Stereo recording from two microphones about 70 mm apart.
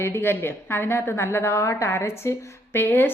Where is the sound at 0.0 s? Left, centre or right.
Left.